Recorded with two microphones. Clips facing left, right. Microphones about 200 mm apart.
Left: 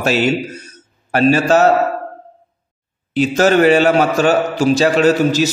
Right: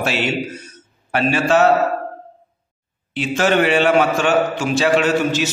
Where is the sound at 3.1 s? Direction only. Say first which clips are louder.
Left 5 dB; 40° left (ahead or behind).